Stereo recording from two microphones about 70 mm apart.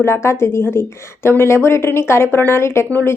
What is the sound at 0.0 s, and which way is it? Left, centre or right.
Speech, left.